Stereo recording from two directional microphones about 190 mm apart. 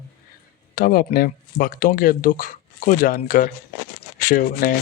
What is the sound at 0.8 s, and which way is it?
Speech, 50° left (ahead or behind).